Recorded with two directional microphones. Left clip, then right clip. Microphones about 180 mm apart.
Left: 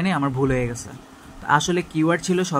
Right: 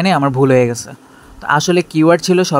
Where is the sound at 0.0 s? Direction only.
40° right (ahead or behind).